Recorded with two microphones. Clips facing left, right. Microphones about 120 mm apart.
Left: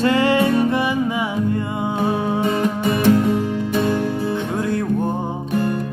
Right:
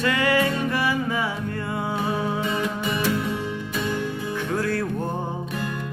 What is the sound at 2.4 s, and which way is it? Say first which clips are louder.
Music: left 6 dB; 50° left (ahead or behind).